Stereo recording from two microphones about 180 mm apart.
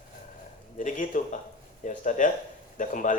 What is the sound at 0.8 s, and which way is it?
A man's voice, 45° left (ahead or behind).